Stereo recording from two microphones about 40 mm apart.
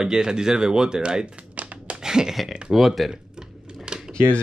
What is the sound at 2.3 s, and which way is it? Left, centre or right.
Speech, centre.